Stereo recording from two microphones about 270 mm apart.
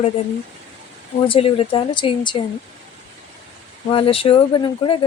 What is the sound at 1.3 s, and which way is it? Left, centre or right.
Speech, left.